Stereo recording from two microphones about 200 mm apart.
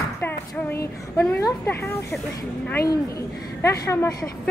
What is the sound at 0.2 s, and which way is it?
Child singing, 10° left (ahead or behind).